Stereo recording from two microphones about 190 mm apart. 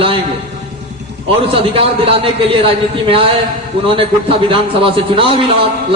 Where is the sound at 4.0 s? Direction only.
30° right (ahead or behind).